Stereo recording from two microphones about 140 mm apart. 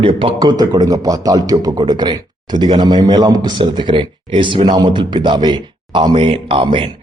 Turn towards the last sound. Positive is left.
turn(degrees=-40)  # may be behind; listen again after turning